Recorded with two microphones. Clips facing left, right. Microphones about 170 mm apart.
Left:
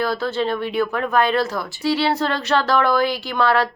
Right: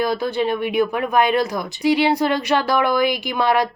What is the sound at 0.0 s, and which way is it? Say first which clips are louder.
A woman's voice: right 1 dB; 15° right (ahead or behind).